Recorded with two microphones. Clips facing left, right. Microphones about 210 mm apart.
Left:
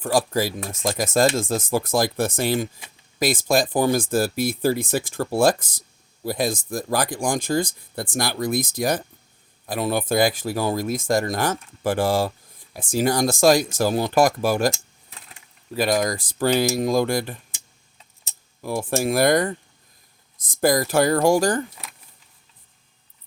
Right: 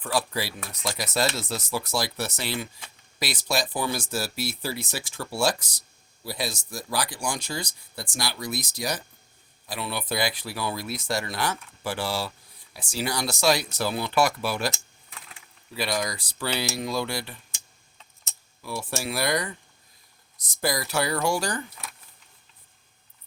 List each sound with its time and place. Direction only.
0.0 s speech: 45° left (ahead or behind)
15.7 s speech: 50° left (ahead or behind)